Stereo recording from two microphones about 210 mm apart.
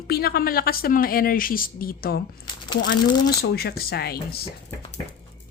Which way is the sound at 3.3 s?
50° left (ahead or behind).